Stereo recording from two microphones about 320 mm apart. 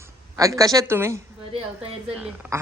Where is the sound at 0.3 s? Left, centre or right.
Centre.